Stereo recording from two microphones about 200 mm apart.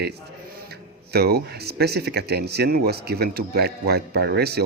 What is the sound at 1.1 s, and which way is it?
Speech, 50° right (ahead or behind).